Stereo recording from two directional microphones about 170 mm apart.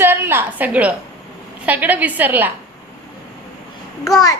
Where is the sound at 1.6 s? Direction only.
10° right (ahead or behind).